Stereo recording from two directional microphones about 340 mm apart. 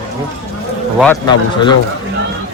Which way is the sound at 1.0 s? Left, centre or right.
Centre.